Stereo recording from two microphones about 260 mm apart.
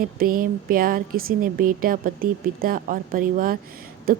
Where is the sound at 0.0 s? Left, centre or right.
Right.